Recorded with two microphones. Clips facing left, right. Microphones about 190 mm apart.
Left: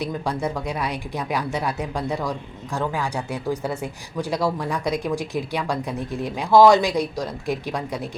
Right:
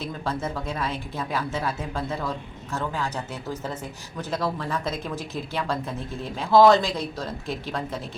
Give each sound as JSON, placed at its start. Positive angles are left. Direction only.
{"t": 0.0, "sound": "speech", "side_deg": 15}